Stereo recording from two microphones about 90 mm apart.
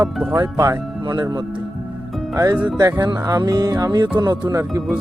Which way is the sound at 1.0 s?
55° right (ahead or behind).